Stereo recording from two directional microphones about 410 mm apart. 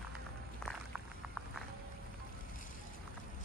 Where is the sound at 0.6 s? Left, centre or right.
Centre.